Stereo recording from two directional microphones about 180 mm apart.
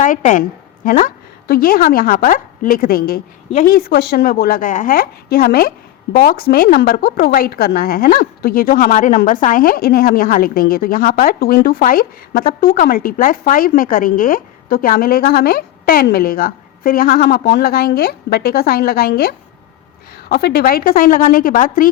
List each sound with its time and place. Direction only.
0.0 s a woman's voice: 45° left (ahead or behind)